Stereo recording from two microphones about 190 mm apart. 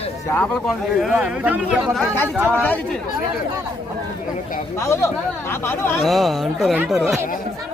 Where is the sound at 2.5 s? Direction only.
10° left (ahead or behind).